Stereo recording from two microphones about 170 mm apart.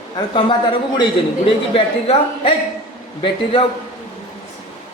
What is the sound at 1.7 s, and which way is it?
Speech, 35° left (ahead or behind).